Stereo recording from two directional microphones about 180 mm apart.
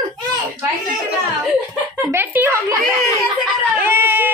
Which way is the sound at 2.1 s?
10° right (ahead or behind).